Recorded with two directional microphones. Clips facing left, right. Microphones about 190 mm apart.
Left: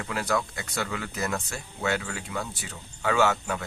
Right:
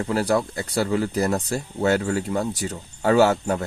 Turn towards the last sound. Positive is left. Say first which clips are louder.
# right 7 dB
turn(degrees=-40)  # may be behind; listen again after turning